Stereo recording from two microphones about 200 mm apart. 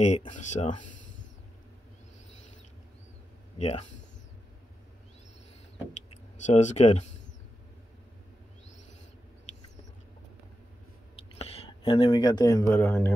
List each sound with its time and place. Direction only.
0.3 s speech: 35° left (ahead or behind)
3.5 s speech: 35° left (ahead or behind)
6.4 s speech: 35° left (ahead or behind)
11.3 s speech: 30° left (ahead or behind); by 13.1 s 10° left (ahead or behind)